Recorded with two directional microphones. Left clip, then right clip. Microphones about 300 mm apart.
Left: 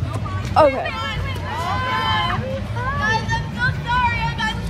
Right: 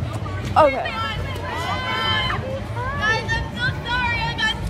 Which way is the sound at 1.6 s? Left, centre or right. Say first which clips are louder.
Left 3 dB; left.